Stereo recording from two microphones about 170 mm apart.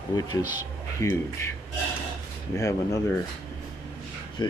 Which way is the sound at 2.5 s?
20° left (ahead or behind).